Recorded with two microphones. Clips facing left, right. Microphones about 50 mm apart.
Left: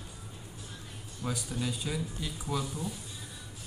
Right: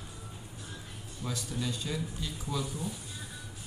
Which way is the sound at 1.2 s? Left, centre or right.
Centre.